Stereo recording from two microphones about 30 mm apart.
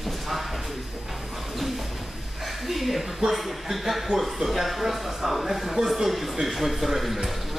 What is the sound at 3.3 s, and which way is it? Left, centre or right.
Speech, centre.